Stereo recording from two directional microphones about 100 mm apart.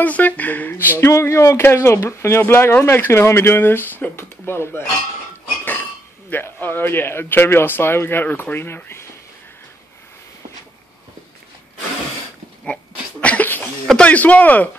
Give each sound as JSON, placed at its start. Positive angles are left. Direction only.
{"t": 0.0, "sound": "speech", "side_deg": 15}
{"t": 6.3, "sound": "speech", "side_deg": 20}
{"t": 13.2, "sound": "a sound", "side_deg": 15}
{"t": 13.8, "sound": "speech", "side_deg": 10}